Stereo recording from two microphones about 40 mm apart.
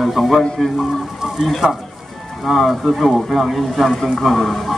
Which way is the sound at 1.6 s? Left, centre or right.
Centre.